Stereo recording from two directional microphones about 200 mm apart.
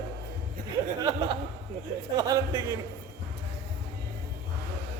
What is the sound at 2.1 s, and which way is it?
Speech, 20° right (ahead or behind).